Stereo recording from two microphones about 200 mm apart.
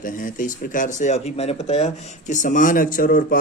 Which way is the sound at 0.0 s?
40° left (ahead or behind).